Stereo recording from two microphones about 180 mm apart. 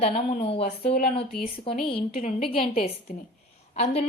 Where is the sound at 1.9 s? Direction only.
35° left (ahead or behind).